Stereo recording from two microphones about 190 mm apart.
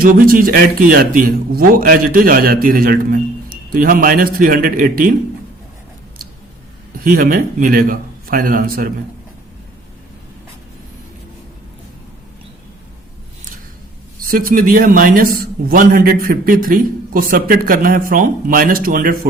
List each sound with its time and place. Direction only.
0.0 s a man's voice: 50° right (ahead or behind)
7.0 s a man's voice: 45° right (ahead or behind)
14.2 s a man's voice: 45° right (ahead or behind)